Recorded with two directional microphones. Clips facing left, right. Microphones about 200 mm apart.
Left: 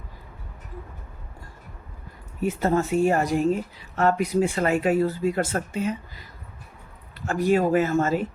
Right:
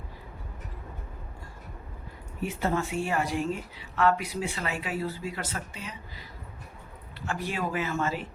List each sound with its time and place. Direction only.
2.4 s speech: 40° left (ahead or behind)
7.3 s speech: 45° left (ahead or behind)